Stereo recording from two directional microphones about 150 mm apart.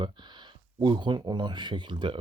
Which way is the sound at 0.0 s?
30° right (ahead or behind).